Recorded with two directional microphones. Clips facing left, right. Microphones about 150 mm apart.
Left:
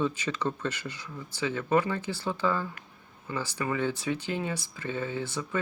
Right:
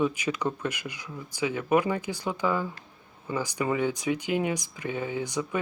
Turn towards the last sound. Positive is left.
turn(degrees=-15)  # may be behind; listen again after turning